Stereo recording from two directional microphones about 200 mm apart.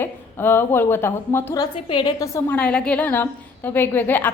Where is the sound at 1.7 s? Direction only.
25° left (ahead or behind).